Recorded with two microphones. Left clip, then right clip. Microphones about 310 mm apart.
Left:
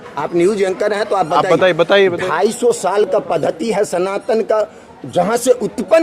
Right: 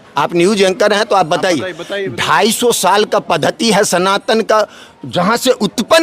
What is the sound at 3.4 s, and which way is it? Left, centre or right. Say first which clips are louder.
Speech: right 4 dB; right.